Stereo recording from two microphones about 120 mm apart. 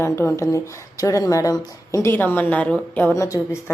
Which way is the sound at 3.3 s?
30° left (ahead or behind).